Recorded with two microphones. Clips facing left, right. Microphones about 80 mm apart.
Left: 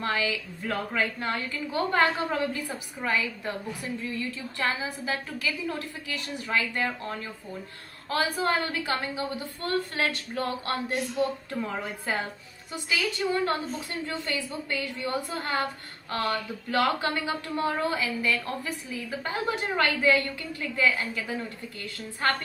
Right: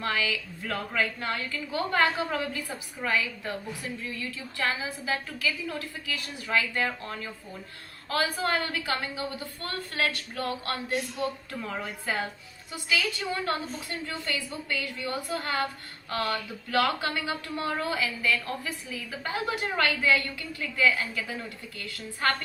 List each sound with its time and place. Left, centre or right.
0.0 s speech: left